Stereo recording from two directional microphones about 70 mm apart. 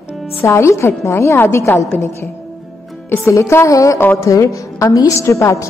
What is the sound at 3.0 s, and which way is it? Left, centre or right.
A woman's voice, left.